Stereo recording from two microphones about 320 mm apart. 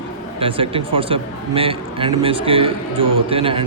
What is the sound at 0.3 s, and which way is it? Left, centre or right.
A man's voice, centre.